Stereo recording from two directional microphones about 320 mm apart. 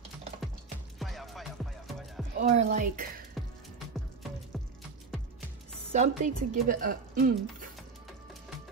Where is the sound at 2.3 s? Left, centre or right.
Right.